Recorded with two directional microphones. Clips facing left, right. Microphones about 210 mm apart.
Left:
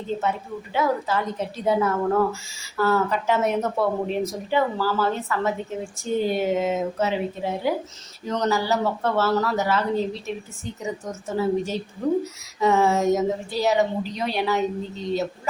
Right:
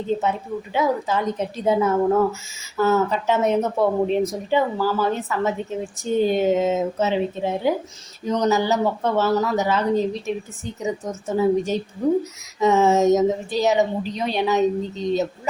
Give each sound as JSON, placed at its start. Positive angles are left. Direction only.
{"t": 0.2, "sound": "speech", "side_deg": -15}
{"t": 11.3, "sound": "speech", "side_deg": -20}